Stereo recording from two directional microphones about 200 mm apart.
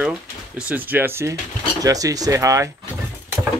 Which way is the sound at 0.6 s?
5° right (ahead or behind).